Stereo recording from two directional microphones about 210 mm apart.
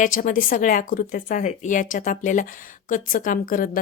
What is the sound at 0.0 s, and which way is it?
Speech, 40° left (ahead or behind).